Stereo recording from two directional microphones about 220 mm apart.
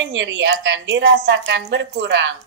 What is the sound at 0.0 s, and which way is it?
A woman's voice, 55° right (ahead or behind).